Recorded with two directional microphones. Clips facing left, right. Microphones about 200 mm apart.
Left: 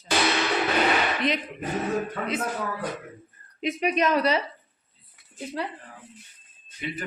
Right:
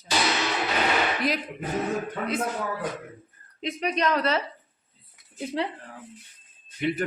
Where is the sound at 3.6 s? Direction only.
15° left (ahead or behind).